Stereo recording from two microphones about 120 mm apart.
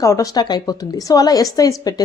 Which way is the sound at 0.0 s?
25° left (ahead or behind).